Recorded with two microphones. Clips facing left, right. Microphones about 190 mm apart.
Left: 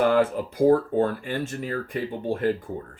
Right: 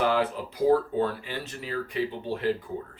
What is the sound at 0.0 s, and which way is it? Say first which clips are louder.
Speech: left 5 dB; 50° left (ahead or behind).